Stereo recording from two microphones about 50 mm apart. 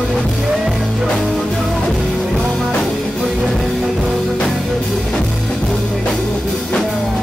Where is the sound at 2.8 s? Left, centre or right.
Centre.